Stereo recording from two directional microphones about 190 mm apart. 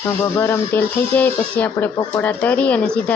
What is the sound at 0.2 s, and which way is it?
Speech, 15° left (ahead or behind).